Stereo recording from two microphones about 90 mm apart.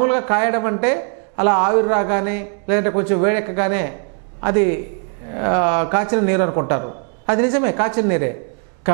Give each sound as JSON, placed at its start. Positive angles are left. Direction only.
{"t": 0.0, "sound": "speech", "side_deg": -20}